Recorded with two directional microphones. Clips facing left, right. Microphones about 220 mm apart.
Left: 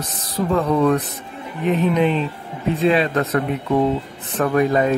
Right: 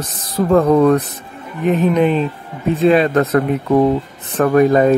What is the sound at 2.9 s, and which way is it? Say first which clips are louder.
Speech: right 6 dB; 50° right (ahead or behind).